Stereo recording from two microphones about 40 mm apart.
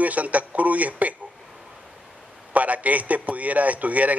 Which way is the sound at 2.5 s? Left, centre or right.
Right.